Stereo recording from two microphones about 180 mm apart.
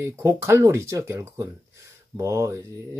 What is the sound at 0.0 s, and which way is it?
Speech, 15° right (ahead or behind).